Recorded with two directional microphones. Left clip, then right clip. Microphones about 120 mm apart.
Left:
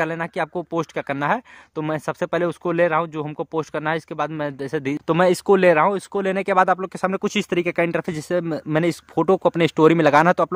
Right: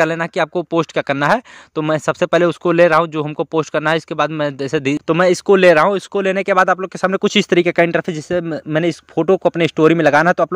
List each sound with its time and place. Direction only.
0.0 s speech: 35° right (ahead or behind)
5.0 s speech: 10° right (ahead or behind)
7.1 s speech: 30° right (ahead or behind)
8.0 s speech: 10° right (ahead or behind)